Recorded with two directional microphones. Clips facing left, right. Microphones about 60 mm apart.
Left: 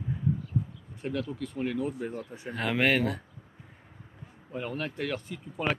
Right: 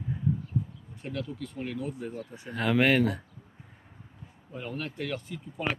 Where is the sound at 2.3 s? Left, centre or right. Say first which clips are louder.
Right 5 dB; centre.